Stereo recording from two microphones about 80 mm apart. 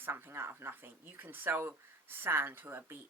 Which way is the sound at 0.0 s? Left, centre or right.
Right.